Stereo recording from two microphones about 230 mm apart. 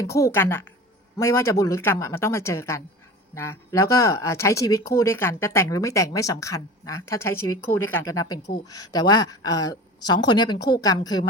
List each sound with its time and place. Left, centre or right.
0.0 s speech: centre